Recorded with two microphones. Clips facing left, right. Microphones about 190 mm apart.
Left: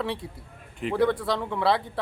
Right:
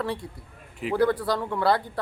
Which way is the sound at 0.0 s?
Centre (ahead or behind).